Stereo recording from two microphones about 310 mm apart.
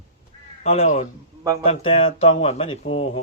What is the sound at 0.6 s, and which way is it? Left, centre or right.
Speech, left.